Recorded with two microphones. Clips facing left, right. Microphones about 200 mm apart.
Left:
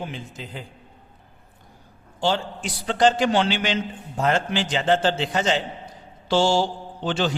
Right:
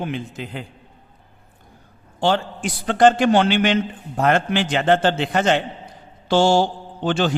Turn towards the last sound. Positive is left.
turn(degrees=-50)  # may be behind; listen again after turning